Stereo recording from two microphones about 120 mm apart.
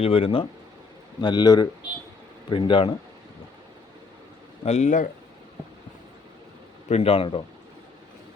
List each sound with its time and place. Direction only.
0.0 s speech: 50° left (ahead or behind)
1.2 s speech: 35° left (ahead or behind)
4.6 s speech: 70° left (ahead or behind)
6.8 s speech: 60° left (ahead or behind)